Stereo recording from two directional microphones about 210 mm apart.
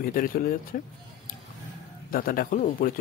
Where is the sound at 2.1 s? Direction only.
45° left (ahead or behind).